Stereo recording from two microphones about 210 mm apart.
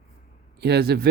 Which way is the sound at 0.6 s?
50° right (ahead or behind).